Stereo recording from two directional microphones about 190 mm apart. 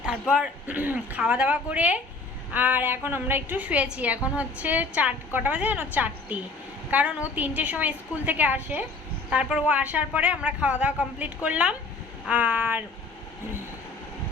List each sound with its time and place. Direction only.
0.0 s a woman's voice: 5° right (ahead or behind)